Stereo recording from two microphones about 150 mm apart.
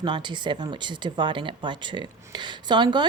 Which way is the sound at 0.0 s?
30° right (ahead or behind).